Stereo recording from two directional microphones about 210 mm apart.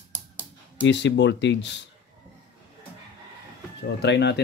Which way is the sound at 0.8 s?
55° left (ahead or behind).